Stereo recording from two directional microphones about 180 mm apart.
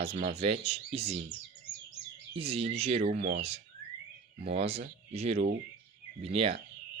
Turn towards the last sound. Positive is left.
turn(degrees=-35)  # may be behind; listen again after turning